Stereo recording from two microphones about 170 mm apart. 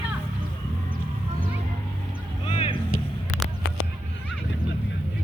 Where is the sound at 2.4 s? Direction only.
30° left (ahead or behind).